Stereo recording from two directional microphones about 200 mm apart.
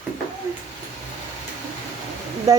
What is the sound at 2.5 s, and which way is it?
Speech, 15° right (ahead or behind).